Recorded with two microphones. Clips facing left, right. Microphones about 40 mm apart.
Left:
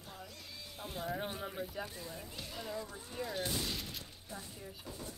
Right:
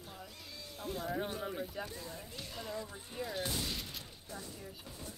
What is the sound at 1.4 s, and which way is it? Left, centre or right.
Speech, centre.